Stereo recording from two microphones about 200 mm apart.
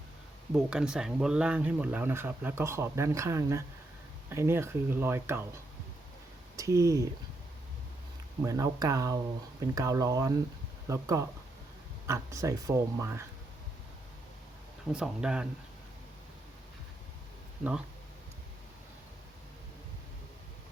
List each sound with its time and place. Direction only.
0.5 s speech: 5° right (ahead or behind)
6.6 s speech: 15° right (ahead or behind)
8.4 s speech: 15° right (ahead or behind)
14.9 s speech: 5° right (ahead or behind)
17.6 s speech: 5° right (ahead or behind)